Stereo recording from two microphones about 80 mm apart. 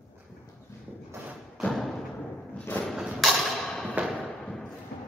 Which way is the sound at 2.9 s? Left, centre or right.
Centre.